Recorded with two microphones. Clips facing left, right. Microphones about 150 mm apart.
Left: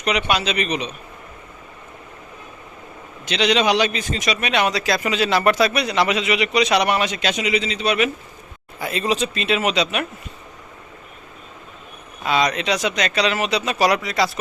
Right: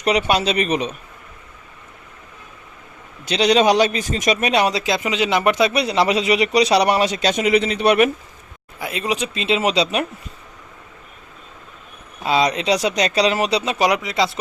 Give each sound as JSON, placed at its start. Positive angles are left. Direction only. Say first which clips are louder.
{"t": 0.0, "sound": "a man's voice", "louder": "right 3 dB", "side_deg": -40}
{"t": 3.2, "sound": "a man's voice", "louder": "right 3 dB", "side_deg": -40}
{"t": 8.8, "sound": "speech", "louder": "left 2 dB", "side_deg": -10}
{"t": 12.2, "sound": "a man's voice", "louder": "right 2 dB", "side_deg": -30}
{"t": 13.7, "sound": "speech", "louder": "left 2 dB", "side_deg": -20}